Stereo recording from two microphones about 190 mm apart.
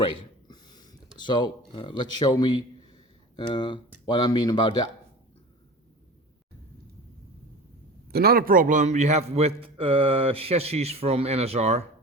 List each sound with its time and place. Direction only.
0.0 s a sound: 25° left (ahead or behind)
3.3 s speech: 25° left (ahead or behind)
8.0 s a man's voice: 55° right (ahead or behind); by 11.9 s 35° right (ahead or behind)